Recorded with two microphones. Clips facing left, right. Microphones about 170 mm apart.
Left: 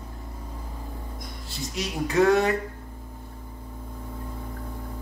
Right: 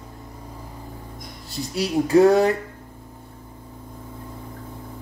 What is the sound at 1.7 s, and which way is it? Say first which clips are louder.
Speech: right 9 dB; 35° right (ahead or behind).